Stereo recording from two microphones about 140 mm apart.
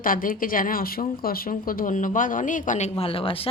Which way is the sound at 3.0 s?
40° left (ahead or behind).